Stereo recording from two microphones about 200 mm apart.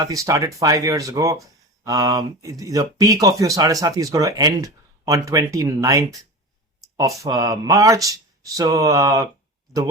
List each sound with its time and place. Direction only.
0.0 s speech: 15° right (ahead or behind)